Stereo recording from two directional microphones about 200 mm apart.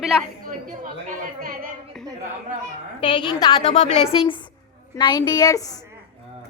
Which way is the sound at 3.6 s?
35° left (ahead or behind).